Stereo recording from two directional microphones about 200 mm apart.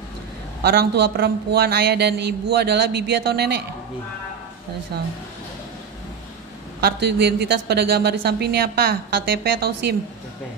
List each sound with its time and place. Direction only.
0.6 s speech: 50° right (ahead or behind)
6.8 s speech: 55° right (ahead or behind)